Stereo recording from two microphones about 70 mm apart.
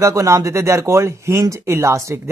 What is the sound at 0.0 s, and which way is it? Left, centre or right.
Speech, right.